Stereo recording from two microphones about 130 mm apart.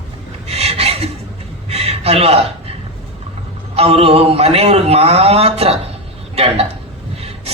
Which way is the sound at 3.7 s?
50° right (ahead or behind).